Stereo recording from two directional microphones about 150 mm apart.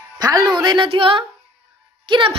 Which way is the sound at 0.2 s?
25° right (ahead or behind).